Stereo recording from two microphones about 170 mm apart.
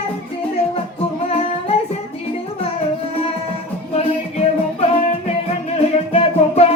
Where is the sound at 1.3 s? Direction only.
35° left (ahead or behind).